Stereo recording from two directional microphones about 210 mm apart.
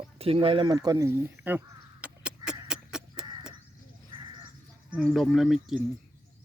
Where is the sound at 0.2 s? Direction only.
25° right (ahead or behind).